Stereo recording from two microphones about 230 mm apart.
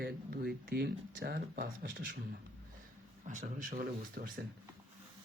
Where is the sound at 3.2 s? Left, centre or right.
Right.